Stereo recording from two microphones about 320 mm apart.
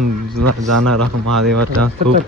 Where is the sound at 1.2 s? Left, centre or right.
Right.